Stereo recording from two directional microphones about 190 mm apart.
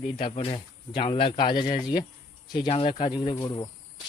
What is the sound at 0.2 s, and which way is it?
Speech, 30° left (ahead or behind).